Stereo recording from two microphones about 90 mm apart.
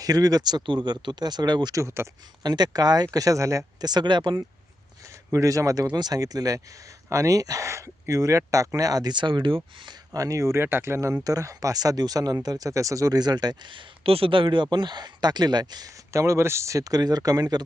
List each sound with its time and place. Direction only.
0.0 s speech: 45° right (ahead or behind)
1.7 s speech: 30° right (ahead or behind)
2.4 s speech: 50° right (ahead or behind)
3.8 s speech: 50° right (ahead or behind)
5.3 s speech: 40° right (ahead or behind)
5.9 s speech: 50° right (ahead or behind)
9.1 s speech: 60° right (ahead or behind)
10.1 s speech: 40° right (ahead or behind)
16.1 s speech: 35° right (ahead or behind)